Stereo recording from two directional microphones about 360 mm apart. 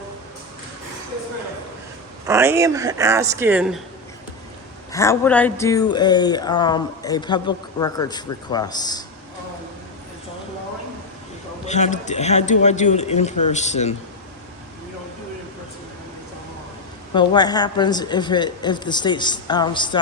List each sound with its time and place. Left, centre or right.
2.2 s speech: centre
4.9 s speech: centre
11.6 s a man's voice: centre
17.2 s speech: centre